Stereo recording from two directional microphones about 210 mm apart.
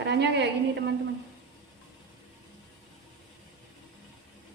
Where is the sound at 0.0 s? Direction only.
55° right (ahead or behind).